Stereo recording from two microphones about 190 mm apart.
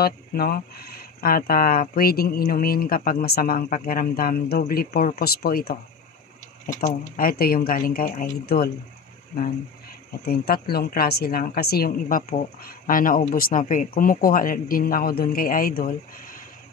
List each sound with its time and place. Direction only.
0.0 s a woman's voice: 55° left (ahead or behind)
6.8 s a woman's voice: 45° left (ahead or behind)
10.2 s a woman's voice: 55° left (ahead or behind)